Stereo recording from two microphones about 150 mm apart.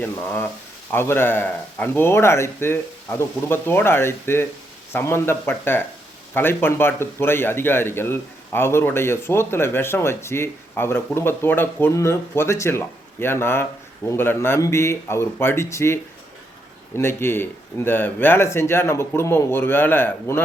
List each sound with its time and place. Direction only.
0.0 s a man's voice: 15° left (ahead or behind)